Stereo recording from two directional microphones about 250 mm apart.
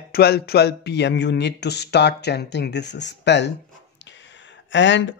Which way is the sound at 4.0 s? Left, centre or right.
Left.